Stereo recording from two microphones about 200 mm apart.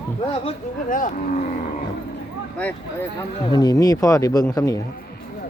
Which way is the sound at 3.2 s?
20° left (ahead or behind).